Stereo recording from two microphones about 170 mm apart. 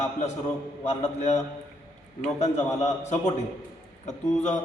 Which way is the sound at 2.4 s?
40° left (ahead or behind).